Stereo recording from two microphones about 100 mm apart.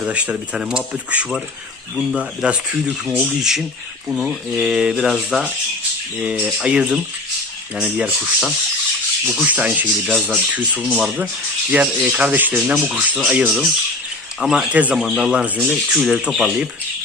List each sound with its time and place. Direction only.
0.1 s rub: 15° right (ahead or behind)
3.1 s speech: 5° right (ahead or behind)
6.2 s rub: 15° right (ahead or behind)
15.7 s speech: centre (ahead or behind)